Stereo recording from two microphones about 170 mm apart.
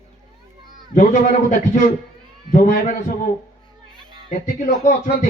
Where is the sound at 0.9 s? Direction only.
45° left (ahead or behind).